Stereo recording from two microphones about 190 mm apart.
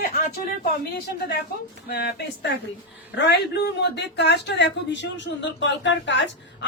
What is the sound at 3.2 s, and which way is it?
Speech, 60° left (ahead or behind).